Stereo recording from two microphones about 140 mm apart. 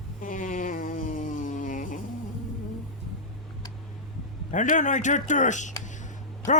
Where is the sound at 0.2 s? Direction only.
70° left (ahead or behind).